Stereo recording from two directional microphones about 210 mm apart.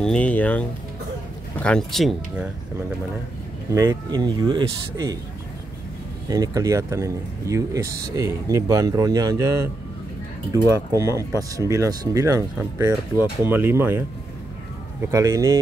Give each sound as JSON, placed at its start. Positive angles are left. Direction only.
{"t": 0.0, "sound": "speech", "side_deg": 5}
{"t": 3.7, "sound": "speech", "side_deg": -15}
{"t": 6.2, "sound": "speech", "side_deg": -15}
{"t": 10.5, "sound": "speech", "side_deg": -15}